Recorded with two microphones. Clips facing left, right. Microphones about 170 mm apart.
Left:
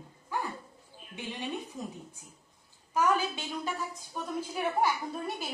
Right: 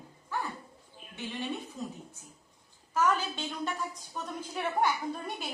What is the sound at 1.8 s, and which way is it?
Speech, 15° left (ahead or behind).